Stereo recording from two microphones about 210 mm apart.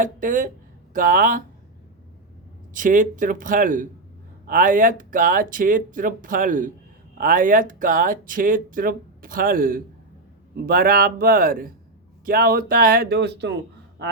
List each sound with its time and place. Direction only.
0.0 s speech: 40° right (ahead or behind)
2.7 s speech: 40° right (ahead or behind)
14.0 s a sound: 55° right (ahead or behind)